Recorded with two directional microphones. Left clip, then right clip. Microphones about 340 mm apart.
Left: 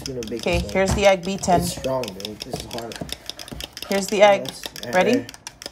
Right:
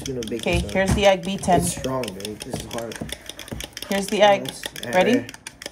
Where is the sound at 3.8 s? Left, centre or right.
Centre.